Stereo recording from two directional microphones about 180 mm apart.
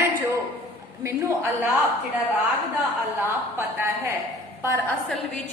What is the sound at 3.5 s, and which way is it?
Speech, 15° right (ahead or behind).